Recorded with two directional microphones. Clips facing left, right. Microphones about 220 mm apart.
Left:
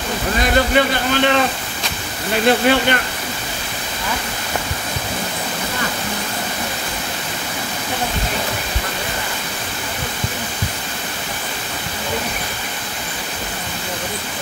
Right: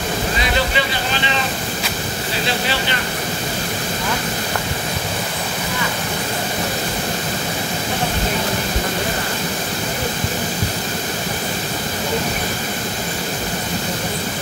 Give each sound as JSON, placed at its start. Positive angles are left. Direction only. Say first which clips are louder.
{"t": 0.4, "sound": "speech", "louder": "left 8 dB", "side_deg": 50}
{"t": 2.4, "sound": "speech", "louder": "left 10 dB", "side_deg": 55}